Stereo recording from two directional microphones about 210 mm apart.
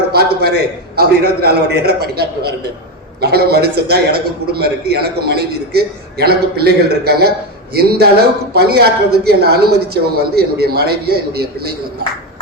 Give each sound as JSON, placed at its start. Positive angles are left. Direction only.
{"t": 0.1, "sound": "a man's voice", "side_deg": -50}